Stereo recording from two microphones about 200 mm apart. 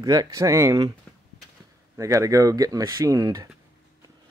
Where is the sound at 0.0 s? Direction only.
20° right (ahead or behind).